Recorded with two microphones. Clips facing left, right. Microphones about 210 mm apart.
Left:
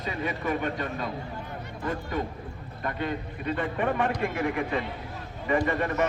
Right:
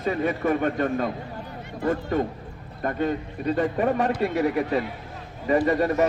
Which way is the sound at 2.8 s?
40° right (ahead or behind).